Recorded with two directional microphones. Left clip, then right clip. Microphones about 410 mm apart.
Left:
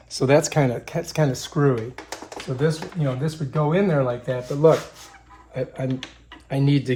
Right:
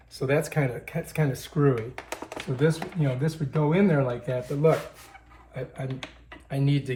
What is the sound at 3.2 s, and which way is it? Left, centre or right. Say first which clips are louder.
Speech: left 2 dB; centre.